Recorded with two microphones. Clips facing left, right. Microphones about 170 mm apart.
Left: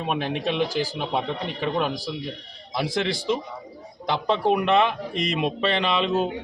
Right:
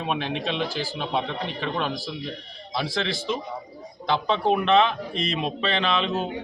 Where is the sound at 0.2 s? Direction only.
50° left (ahead or behind).